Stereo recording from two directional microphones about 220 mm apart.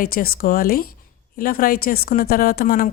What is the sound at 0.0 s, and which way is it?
A woman's voice, 40° left (ahead or behind).